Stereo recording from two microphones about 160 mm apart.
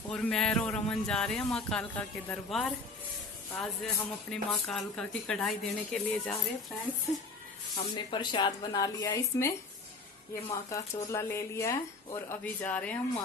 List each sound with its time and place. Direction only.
0.1 s speech: 5° left (ahead or behind)
7.7 s speech: 30° left (ahead or behind); by 12.9 s 10° left (ahead or behind)